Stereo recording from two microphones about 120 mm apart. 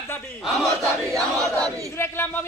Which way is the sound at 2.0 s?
20° left (ahead or behind).